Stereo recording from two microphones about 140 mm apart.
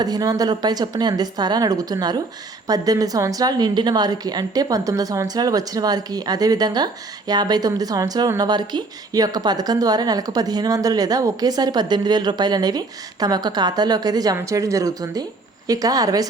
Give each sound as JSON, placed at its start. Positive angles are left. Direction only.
{"t": 0.0, "sound": "a woman's voice", "side_deg": -25}